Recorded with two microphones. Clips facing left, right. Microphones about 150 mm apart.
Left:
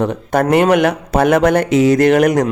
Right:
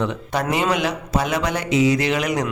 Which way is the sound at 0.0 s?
50° left (ahead or behind).